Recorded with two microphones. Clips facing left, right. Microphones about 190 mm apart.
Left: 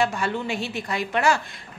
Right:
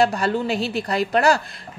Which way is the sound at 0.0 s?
35° right (ahead or behind).